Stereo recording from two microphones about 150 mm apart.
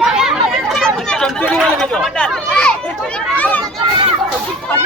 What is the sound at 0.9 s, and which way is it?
Speech, 5° left (ahead or behind).